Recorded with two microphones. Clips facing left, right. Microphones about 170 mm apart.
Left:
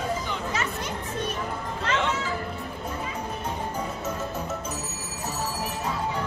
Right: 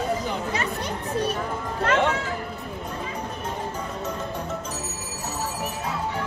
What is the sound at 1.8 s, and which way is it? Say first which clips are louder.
Music: right 5 dB; 55° right (ahead or behind).